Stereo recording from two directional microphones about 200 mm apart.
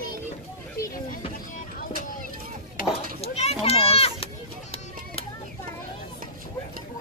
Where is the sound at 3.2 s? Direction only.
30° left (ahead or behind).